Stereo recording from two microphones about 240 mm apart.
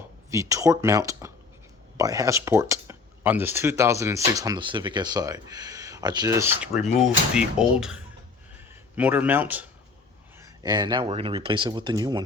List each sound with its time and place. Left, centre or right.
0.3 s speech: centre
10.6 s speech: centre